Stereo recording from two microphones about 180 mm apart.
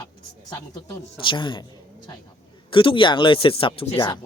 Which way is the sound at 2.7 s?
30° left (ahead or behind).